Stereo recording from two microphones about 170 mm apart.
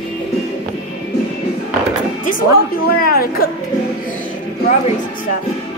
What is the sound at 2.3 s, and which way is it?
Music, 60° left (ahead or behind).